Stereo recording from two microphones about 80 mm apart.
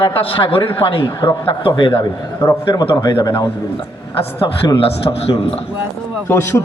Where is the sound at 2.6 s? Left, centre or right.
Left.